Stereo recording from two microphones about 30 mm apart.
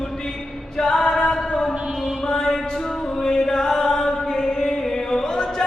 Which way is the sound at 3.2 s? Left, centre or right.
Left.